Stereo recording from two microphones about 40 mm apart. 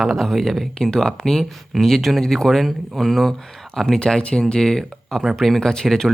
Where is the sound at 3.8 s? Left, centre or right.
Centre.